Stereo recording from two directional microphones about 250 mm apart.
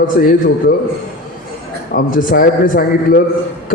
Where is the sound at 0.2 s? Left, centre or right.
Left.